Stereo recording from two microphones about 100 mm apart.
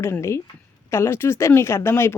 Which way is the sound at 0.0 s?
25° left (ahead or behind).